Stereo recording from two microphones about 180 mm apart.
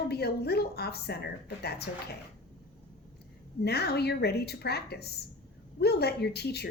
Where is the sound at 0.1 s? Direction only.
65° left (ahead or behind).